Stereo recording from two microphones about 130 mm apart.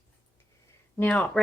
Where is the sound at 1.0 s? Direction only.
10° left (ahead or behind).